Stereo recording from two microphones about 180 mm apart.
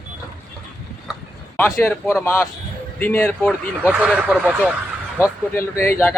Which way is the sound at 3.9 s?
5° right (ahead or behind).